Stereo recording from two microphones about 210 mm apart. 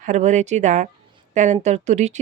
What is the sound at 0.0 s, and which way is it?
A woman's voice, 35° right (ahead or behind).